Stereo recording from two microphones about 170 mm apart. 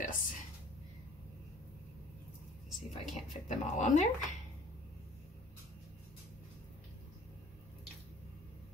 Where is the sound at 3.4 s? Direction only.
45° left (ahead or behind).